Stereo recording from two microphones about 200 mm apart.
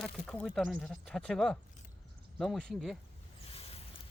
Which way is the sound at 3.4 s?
30° left (ahead or behind).